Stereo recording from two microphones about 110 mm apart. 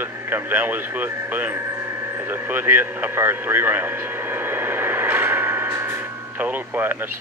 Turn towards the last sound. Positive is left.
turn(degrees=-15)  # may be behind; listen again after turning